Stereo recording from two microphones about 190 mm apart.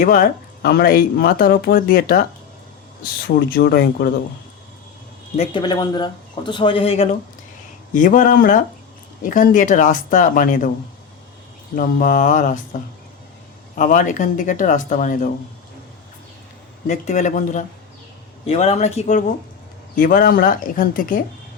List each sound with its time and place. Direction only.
0.0 s speech: 50° left (ahead or behind)
5.4 s speech: 25° left (ahead or behind)
7.9 s speech: 45° left (ahead or behind)
11.7 s speech: 45° left (ahead or behind)
13.7 s speech: 45° left (ahead or behind)
16.8 s speech: 40° left (ahead or behind)